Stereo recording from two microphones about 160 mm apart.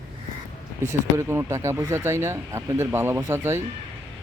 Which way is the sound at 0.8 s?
15° right (ahead or behind).